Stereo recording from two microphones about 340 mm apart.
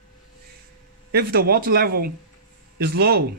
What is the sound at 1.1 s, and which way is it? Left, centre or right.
Speech, right.